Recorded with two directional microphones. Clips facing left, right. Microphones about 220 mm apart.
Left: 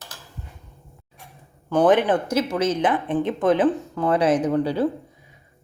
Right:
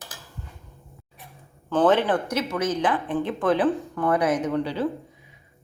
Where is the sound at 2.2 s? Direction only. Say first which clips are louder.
Left 4 dB; 30° left (ahead or behind).